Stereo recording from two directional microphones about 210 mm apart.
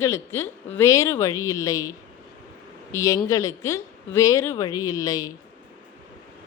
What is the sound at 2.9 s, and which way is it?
Speech, 15° left (ahead or behind).